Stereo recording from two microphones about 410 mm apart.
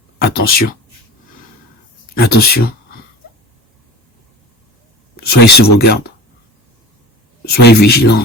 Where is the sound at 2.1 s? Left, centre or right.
Left.